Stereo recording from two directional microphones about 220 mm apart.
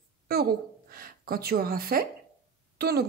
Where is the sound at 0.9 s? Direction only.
40° right (ahead or behind).